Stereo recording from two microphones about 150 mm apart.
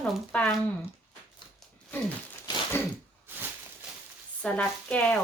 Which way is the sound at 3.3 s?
15° right (ahead or behind).